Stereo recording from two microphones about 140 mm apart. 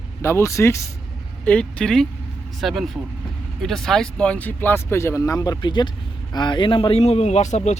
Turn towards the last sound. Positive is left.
turn(degrees=55)  # may be behind; listen again after turning